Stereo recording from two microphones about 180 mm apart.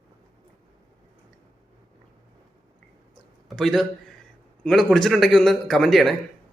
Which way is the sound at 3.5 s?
Centre (ahead or behind).